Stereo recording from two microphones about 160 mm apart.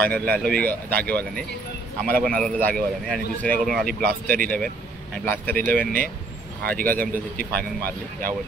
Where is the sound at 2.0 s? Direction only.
65° right (ahead or behind).